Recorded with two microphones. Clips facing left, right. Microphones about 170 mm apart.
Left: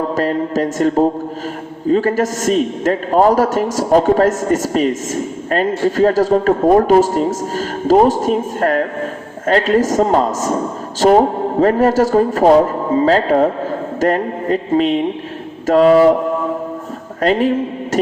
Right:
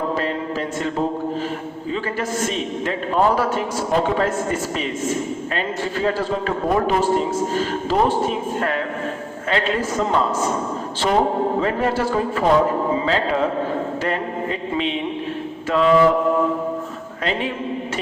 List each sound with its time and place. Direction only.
0.2 s a man's voice: 40° left (ahead or behind)
14.0 s a sound: 45° left (ahead or behind)
15.6 s a man's voice: 40° left (ahead or behind)
17.2 s a man's voice: 45° left (ahead or behind)